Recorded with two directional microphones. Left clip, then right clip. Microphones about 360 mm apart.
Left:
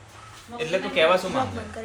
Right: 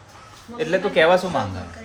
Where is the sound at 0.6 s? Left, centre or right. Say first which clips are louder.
Right 4 dB; right.